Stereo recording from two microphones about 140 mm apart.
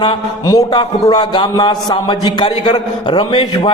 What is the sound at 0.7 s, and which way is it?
A man's voice, 30° left (ahead or behind).